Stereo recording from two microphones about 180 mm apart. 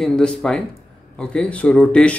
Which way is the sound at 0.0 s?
5° left (ahead or behind).